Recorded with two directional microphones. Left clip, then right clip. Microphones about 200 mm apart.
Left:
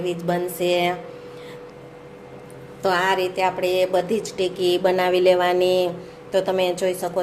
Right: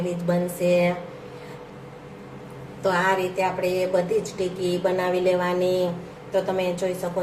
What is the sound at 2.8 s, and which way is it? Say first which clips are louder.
A woman's voice: left 2 dB; 45° left (ahead or behind).